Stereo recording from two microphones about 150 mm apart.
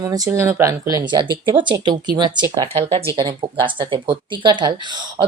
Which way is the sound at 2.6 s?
40° right (ahead or behind).